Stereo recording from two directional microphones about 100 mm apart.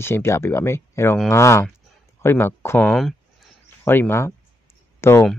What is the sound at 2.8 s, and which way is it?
Speech, 5° left (ahead or behind).